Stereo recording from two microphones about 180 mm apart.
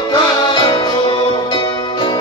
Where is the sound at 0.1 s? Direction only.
25° left (ahead or behind).